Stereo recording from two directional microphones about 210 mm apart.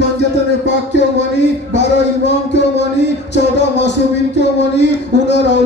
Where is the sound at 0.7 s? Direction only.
55° left (ahead or behind).